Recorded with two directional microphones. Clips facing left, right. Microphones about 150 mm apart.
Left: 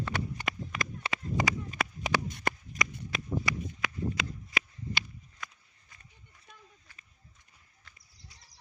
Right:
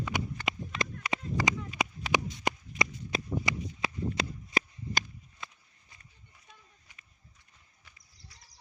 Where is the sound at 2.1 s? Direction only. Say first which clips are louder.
Right 1 dB; 15° right (ahead or behind).